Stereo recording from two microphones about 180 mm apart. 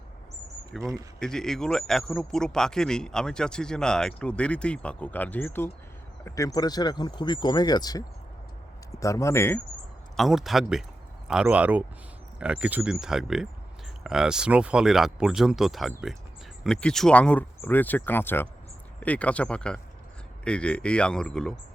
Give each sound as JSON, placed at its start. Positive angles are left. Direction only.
{"t": 0.8, "sound": "speech", "side_deg": -20}
{"t": 1.2, "sound": "speech", "side_deg": 5}
{"t": 10.2, "sound": "speech", "side_deg": 0}